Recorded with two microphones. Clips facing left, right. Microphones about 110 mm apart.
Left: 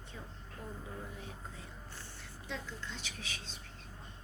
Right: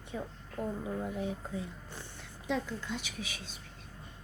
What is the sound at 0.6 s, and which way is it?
Speech, 70° right (ahead or behind).